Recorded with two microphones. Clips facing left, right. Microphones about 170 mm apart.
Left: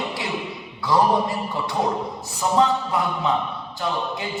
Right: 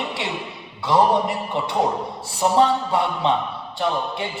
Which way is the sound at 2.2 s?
30° right (ahead or behind).